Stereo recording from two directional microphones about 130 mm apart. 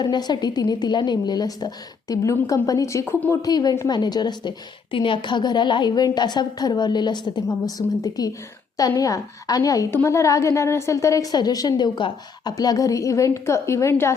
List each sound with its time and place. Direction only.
0.0 s a woman's voice: 35° left (ahead or behind)
3.4 s a woman's voice: 30° left (ahead or behind)